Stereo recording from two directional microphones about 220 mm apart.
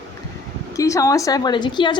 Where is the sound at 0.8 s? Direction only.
15° left (ahead or behind).